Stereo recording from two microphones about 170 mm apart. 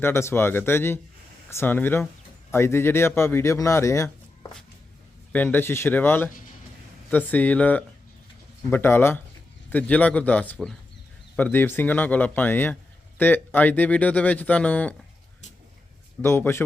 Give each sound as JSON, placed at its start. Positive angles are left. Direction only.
{"t": 0.0, "sound": "speech", "side_deg": 15}
{"t": 5.3, "sound": "speech", "side_deg": 10}
{"t": 16.2, "sound": "speech", "side_deg": 15}